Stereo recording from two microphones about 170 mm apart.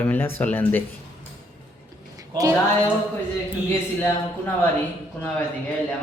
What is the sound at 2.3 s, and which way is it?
Speech, 20° right (ahead or behind).